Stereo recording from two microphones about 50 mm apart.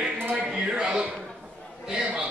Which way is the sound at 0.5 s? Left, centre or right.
Centre.